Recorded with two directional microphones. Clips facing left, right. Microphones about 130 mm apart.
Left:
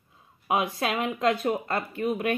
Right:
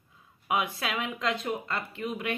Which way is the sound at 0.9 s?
45° left (ahead or behind).